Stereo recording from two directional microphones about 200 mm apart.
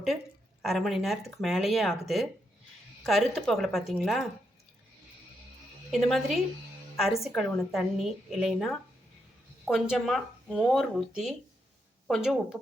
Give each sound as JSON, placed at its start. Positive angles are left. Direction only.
{"t": 0.6, "sound": "speech", "side_deg": 0}
{"t": 5.9, "sound": "speech", "side_deg": 0}